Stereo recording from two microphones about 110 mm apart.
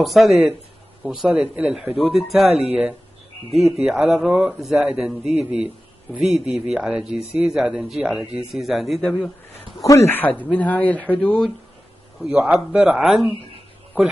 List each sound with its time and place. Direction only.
0.0 s speech: centre (ahead or behind)
9.8 s speech: 25° left (ahead or behind); by 11.5 s 5° left (ahead or behind)
12.2 s speech: 10° right (ahead or behind)